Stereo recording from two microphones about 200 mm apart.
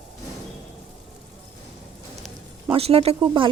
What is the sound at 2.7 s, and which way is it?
Speech, 30° right (ahead or behind).